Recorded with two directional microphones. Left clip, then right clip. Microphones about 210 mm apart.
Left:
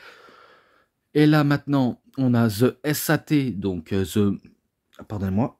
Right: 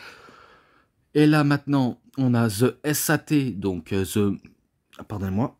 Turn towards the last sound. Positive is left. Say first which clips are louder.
# left 2 dB
turn(degrees=0)  # may be behind; listen again after turning